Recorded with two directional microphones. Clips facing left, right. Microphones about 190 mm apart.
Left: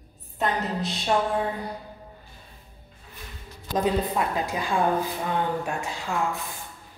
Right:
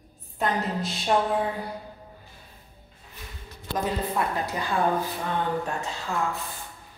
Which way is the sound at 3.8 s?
15° left (ahead or behind).